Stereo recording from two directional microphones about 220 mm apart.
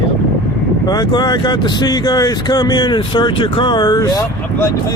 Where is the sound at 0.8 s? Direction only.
20° left (ahead or behind).